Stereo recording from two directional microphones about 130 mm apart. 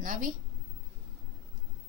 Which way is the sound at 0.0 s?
80° right.